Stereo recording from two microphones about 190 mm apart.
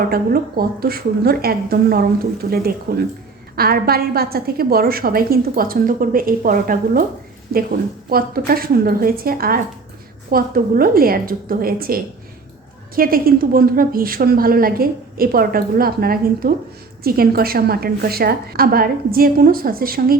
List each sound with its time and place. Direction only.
0.0 s a woman's voice: 50° right (ahead or behind)
8.1 s a woman's voice: 50° right (ahead or behind)
13.0 s a woman's voice: 50° right (ahead or behind)